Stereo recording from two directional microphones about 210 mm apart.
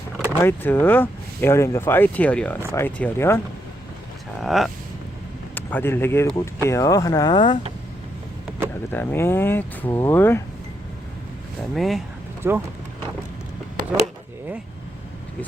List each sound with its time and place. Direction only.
0.3 s speech: 10° left (ahead or behind)
4.4 s speech: centre (ahead or behind); by 7.6 s 25° left (ahead or behind)
8.9 s speech: 10° left (ahead or behind)
11.7 s speech: centre (ahead or behind)
12.4 s speech: 10° right (ahead or behind)